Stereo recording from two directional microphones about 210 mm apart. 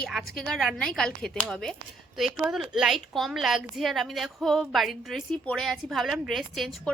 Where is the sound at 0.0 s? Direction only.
Centre (ahead or behind).